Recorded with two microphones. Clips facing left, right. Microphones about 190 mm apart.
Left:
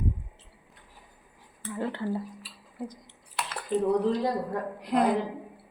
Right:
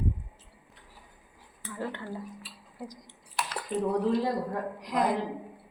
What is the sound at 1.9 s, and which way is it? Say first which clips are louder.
Speech: left 6 dB; 35° left (ahead or behind).